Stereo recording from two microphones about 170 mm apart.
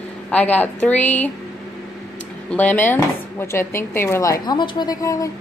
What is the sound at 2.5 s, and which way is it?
Speech, 10° left (ahead or behind).